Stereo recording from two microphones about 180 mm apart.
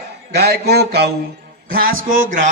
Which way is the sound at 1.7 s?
55° right (ahead or behind).